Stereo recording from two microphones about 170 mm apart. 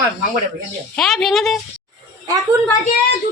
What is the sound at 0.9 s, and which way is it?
Speech, centre (ahead or behind).